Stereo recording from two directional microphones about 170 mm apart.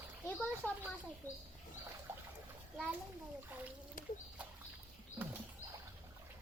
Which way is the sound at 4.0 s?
55° left (ahead or behind).